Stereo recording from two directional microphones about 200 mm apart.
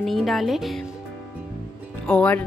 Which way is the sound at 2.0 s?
5° left (ahead or behind).